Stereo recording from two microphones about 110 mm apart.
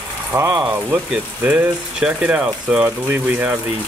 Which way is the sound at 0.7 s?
10° right (ahead or behind).